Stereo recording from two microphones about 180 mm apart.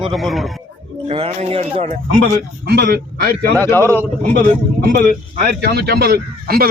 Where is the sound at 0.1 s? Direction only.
Centre (ahead or behind).